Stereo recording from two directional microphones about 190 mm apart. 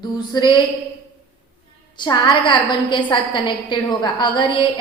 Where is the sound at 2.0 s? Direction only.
25° left (ahead or behind).